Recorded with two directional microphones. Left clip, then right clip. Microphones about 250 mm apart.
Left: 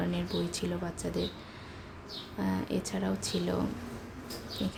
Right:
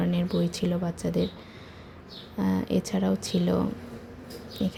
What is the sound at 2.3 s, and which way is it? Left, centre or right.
Speech, centre.